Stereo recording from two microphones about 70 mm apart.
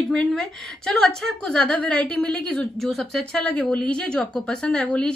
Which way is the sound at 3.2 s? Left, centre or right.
Centre.